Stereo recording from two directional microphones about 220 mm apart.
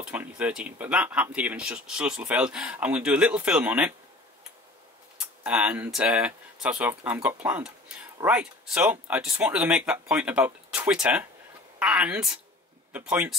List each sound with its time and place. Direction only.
0.0 s speech: 5° right (ahead or behind)
5.4 s speech: 5° right (ahead or behind)